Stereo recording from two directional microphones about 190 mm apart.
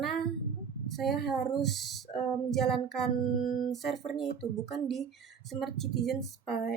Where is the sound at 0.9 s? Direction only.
Centre (ahead or behind).